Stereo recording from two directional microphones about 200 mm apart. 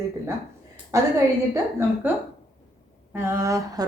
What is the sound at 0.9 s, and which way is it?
A woman's voice, 15° right (ahead or behind).